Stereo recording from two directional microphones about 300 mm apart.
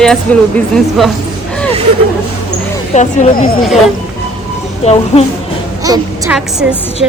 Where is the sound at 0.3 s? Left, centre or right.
Centre.